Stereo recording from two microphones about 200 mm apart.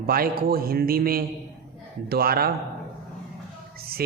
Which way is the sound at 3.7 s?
50° right (ahead or behind).